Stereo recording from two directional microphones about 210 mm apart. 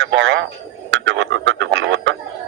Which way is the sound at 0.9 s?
60° right (ahead or behind).